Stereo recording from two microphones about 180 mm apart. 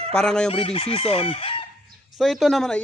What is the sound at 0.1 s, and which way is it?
Chicken, 5° left (ahead or behind).